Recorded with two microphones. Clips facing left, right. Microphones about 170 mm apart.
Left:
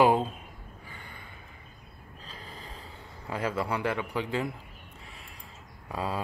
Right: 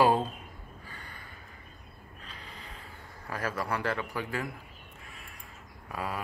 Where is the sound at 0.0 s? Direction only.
15° left (ahead or behind).